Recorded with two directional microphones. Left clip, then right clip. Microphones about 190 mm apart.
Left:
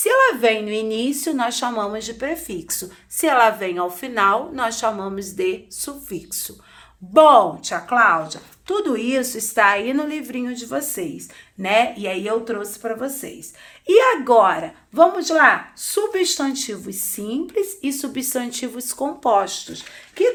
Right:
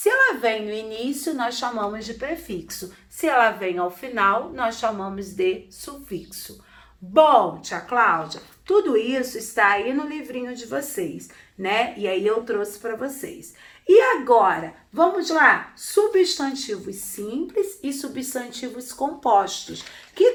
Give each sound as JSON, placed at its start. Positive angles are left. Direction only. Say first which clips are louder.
{"t": 0.0, "sound": "speech", "louder": "left 3 dB", "side_deg": 60}